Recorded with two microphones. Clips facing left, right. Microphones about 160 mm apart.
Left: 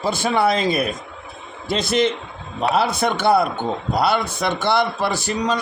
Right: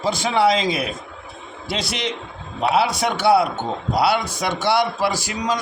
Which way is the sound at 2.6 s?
10° right (ahead or behind).